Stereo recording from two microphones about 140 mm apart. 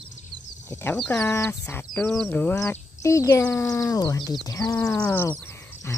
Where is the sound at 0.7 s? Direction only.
15° left (ahead or behind).